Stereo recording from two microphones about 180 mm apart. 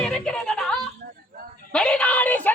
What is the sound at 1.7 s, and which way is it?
Speech, 5° left (ahead or behind).